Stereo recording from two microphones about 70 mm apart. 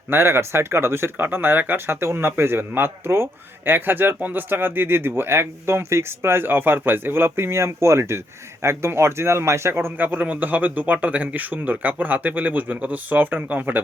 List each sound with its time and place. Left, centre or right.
0.1 s a man's voice: right